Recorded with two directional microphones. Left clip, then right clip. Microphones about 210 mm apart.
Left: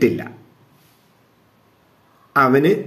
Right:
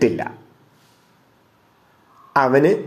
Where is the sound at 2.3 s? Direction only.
15° left (ahead or behind).